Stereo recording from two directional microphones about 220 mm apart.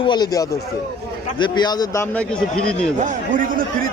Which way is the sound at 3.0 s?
40° right (ahead or behind).